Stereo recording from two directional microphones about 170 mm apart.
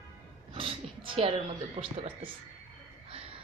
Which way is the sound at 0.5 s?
30° right (ahead or behind).